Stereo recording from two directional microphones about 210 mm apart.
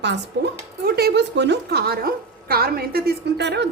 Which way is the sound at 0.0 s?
55° right (ahead or behind).